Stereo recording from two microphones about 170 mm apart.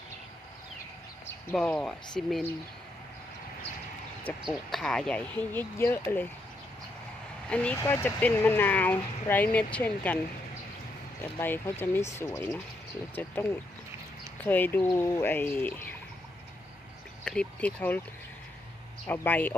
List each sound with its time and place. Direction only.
1.5 s speech: 5° left (ahead or behind)
4.4 s speech: centre (ahead or behind)
7.5 s speech: 5° left (ahead or behind)
11.2 s speech: 15° left (ahead or behind)
17.2 s speech: 5° left (ahead or behind)
19.0 s speech: 10° left (ahead or behind)